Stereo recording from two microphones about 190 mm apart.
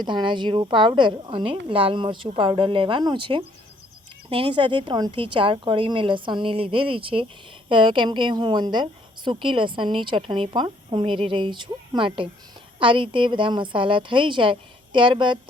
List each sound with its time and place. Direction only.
0.0 s a woman's voice: 25° right (ahead or behind)